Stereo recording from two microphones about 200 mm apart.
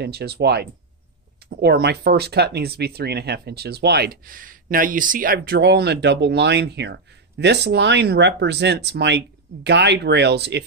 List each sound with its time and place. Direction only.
0.0 s speech: 55° right (ahead or behind)